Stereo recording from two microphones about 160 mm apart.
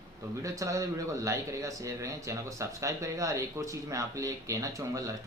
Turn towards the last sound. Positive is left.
turn(degrees=-20)  # may be behind; listen again after turning